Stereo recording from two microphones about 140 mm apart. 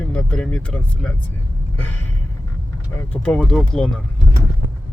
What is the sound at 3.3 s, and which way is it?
Speech, centre (ahead or behind).